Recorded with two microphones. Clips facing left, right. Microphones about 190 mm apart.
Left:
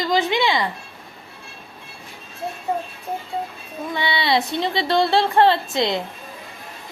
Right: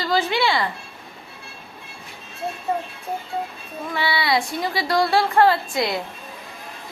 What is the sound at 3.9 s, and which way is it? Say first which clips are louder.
Speech: left 1 dB; 20° left (ahead or behind).